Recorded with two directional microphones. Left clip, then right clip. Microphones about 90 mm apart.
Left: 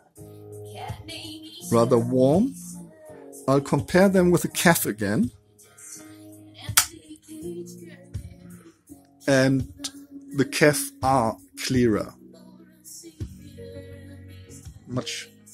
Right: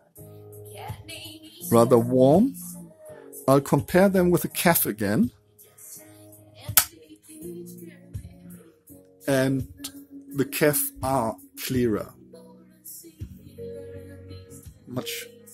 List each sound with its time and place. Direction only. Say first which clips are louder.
0.5 s music: left 3 dB; 30° right (ahead or behind)
1.7 s speech: right 2 dB; 35° right (ahead or behind)
2.7 s music: even; 30° right (ahead or behind)
3.9 s speech: left 2 dB; centre (ahead or behind)
4.9 s speech: even; 20° right (ahead or behind)
9.2 s speech: left 3 dB; 20° left (ahead or behind)
14.9 s speech: left 1 dB; 5° right (ahead or behind)